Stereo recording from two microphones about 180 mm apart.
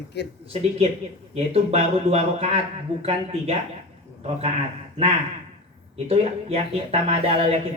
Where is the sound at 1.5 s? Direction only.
35° right (ahead or behind).